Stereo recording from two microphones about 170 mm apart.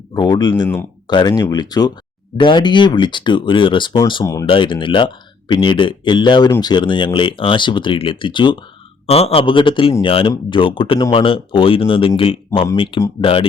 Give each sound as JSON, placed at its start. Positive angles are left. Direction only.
{"t": 0.1, "sound": "speech", "side_deg": 25}